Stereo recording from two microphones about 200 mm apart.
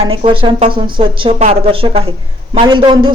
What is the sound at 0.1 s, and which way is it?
A man's voice, 25° right (ahead or behind).